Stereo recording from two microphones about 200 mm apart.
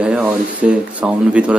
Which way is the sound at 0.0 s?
5° right (ahead or behind).